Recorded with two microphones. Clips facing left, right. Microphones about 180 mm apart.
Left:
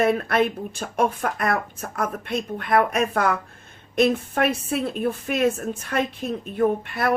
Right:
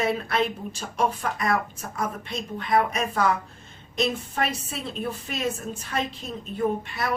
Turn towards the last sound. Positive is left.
turn(degrees=55)  # may be behind; listen again after turning